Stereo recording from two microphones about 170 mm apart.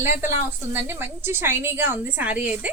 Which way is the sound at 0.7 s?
15° right (ahead or behind).